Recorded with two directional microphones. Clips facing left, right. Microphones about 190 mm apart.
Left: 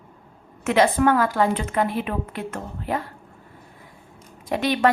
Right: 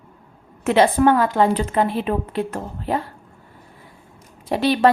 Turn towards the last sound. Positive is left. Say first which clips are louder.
# right 4 dB
turn(degrees=-30)  # may be behind; listen again after turning